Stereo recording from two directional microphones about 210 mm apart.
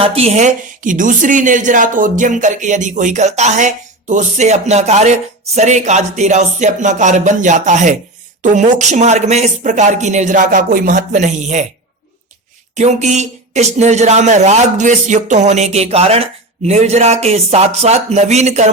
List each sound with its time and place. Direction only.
0.0 s speech: 30° right (ahead or behind)
12.7 s speech: 35° right (ahead or behind)